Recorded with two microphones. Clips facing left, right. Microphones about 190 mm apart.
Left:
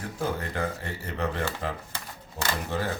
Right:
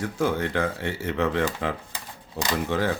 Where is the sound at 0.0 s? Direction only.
90° right.